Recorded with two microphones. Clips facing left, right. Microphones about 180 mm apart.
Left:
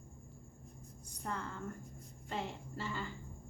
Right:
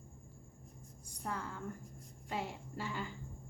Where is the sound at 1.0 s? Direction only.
5° right (ahead or behind).